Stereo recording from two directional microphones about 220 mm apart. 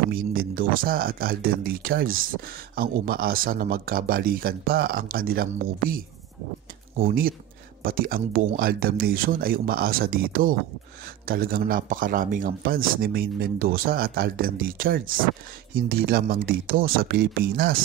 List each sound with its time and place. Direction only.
0.1 s speech: 40° right (ahead or behind)
7.0 s speech: 40° right (ahead or behind)